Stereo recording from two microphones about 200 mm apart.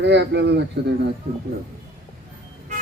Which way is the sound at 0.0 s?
60° right (ahead or behind).